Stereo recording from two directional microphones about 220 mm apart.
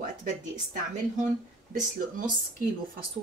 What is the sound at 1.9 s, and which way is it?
Speech, 40° right (ahead or behind).